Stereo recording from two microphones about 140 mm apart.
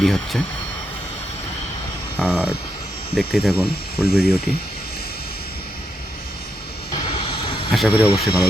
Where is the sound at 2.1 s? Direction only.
Centre (ahead or behind).